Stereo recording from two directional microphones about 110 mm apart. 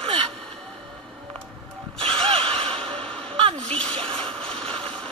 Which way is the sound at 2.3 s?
60° right (ahead or behind).